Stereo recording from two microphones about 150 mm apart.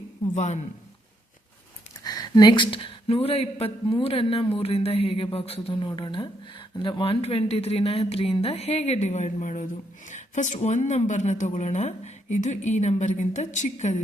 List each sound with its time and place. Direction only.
0.3 s speech: 50° left (ahead or behind)
2.0 s speech: 25° left (ahead or behind); by 14.0 s 50° left (ahead or behind)